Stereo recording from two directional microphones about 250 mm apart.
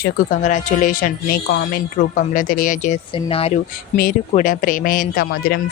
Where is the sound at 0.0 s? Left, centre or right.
Left.